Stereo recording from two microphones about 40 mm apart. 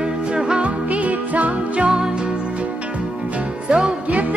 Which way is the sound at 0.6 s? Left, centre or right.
Right.